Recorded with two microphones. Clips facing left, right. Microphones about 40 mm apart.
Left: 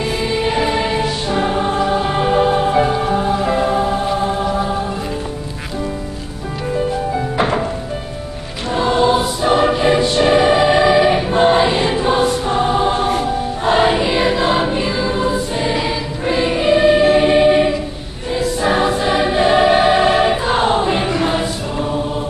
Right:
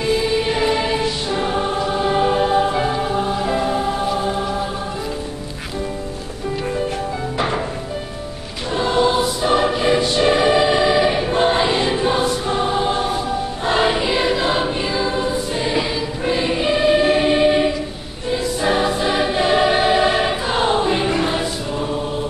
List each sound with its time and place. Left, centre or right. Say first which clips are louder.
0.2 s music: left 1 dB; centre
1.7 s choir: left 2 dB; centre
3.2 s music: left 3 dB; centre
7.3 s music: left 3 dB; centre
8.7 s choir: left 3 dB; centre